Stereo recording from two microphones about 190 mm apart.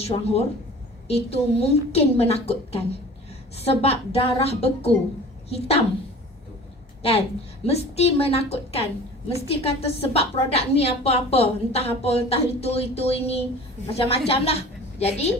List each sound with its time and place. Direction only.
0.0 s a woman's voice: 30° left (ahead or behind)
7.6 s a woman's voice: 35° left (ahead or behind)